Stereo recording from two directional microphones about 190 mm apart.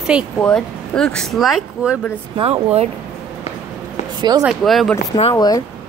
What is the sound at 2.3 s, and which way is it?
Speech, 30° right (ahead or behind).